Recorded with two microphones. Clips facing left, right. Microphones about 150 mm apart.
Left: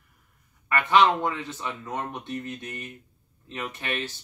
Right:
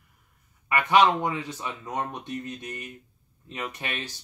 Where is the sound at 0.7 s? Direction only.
15° right (ahead or behind).